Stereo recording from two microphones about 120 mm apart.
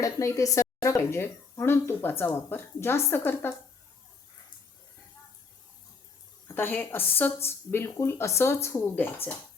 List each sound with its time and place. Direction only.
0.0 s speech: 25° left (ahead or behind)
6.5 s a woman's voice: 15° left (ahead or behind)